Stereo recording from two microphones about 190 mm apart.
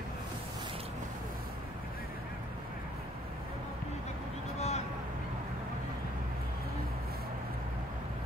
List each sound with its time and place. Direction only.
4.6 s vehicle: 35° left (ahead or behind)